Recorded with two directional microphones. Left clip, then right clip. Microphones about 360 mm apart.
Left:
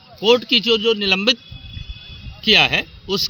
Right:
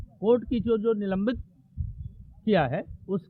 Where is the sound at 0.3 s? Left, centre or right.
Centre.